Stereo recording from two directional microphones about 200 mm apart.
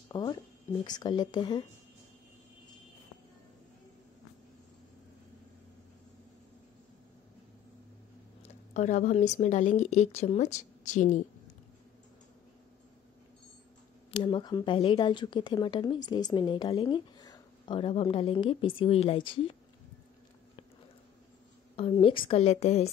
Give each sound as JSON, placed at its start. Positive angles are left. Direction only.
{"t": 0.1, "sound": "a woman's voice", "side_deg": 20}
{"t": 8.4, "sound": "speech", "side_deg": 35}
{"t": 14.1, "sound": "a woman's voice", "side_deg": 25}
{"t": 21.7, "sound": "a woman's voice", "side_deg": 30}